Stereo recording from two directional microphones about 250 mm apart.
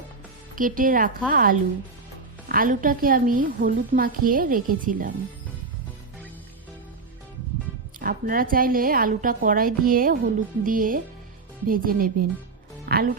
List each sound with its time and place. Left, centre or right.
0.5 s a woman's voice: right
7.9 s a woman's voice: right
12.8 s music: right